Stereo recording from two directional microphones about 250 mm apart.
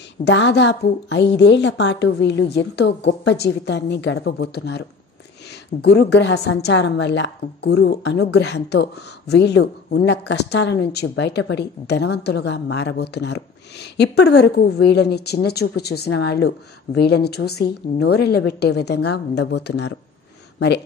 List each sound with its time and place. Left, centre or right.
0.2 s a woman's voice: left